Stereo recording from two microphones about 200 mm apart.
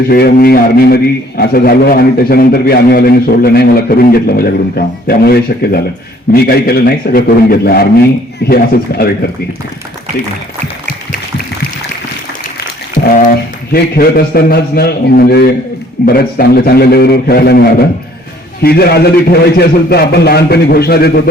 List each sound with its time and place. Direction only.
0.1 s a man's voice: 50° left (ahead or behind)
13.0 s a sound: 60° left (ahead or behind)
13.7 s a man's voice: 50° left (ahead or behind)